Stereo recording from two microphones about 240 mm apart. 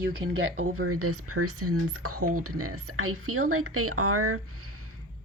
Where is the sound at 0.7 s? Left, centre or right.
Right.